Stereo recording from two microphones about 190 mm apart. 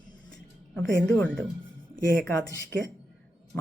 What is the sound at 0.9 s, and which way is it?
Speech, 65° right (ahead or behind).